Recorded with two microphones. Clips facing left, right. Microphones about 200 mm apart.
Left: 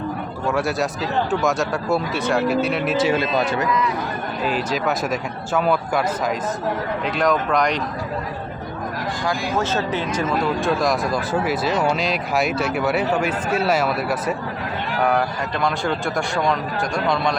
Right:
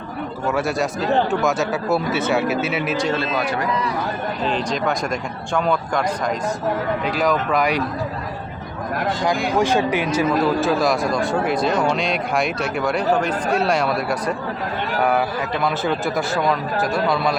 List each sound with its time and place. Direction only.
0.4 s speech: centre (ahead or behind)
3.2 s speech: 20° left (ahead or behind)
4.4 s speech: 5° left (ahead or behind)
9.6 s speech: 15° right (ahead or behind); by 14.3 s 5° left (ahead or behind)
15.6 s speech: 5° right (ahead or behind)